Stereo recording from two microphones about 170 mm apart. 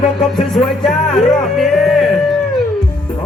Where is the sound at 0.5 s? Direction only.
5° left (ahead or behind).